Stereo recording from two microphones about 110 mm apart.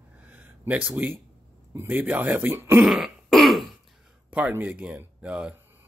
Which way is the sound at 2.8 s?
5° right (ahead or behind).